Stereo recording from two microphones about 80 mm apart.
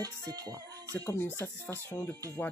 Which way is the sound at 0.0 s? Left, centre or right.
Right.